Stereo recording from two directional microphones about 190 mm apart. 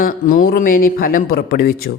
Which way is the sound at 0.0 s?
45° left (ahead or behind).